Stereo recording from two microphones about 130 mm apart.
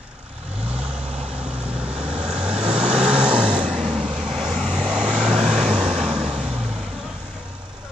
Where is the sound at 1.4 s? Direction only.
10° right (ahead or behind).